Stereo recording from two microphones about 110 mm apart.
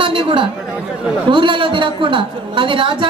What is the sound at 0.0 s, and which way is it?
Chatter, 50° right (ahead or behind).